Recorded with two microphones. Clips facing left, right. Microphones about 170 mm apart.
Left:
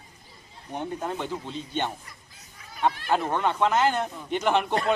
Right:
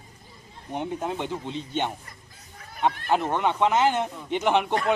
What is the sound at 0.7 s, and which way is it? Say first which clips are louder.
A man's voice: right 2 dB; 15° right (ahead or behind).